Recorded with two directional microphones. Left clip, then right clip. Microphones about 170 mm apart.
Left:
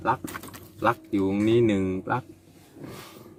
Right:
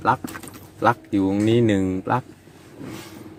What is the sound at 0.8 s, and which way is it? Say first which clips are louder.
Speech: right 5 dB; 20° right (ahead or behind).